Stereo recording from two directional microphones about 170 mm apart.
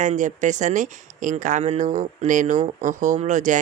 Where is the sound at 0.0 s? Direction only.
45° right (ahead or behind).